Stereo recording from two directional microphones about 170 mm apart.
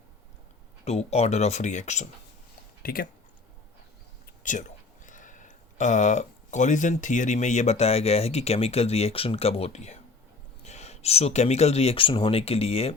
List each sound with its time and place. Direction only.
0.9 s speech: 40° left (ahead or behind)
2.8 s speech: 60° left (ahead or behind)
4.4 s speech: 50° left (ahead or behind)